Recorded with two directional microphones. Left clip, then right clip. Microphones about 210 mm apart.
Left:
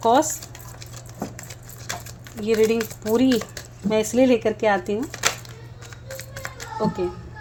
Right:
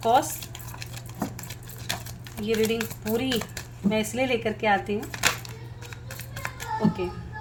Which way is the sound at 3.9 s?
35° left (ahead or behind).